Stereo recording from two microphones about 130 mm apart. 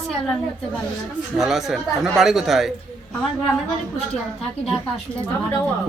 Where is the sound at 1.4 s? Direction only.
Centre (ahead or behind).